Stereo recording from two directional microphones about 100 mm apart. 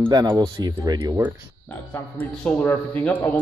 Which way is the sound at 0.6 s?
45° right (ahead or behind).